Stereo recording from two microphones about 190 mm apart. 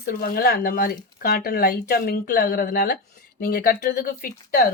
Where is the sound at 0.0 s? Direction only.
50° left (ahead or behind).